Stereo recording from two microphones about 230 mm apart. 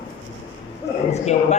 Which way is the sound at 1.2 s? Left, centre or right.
Left.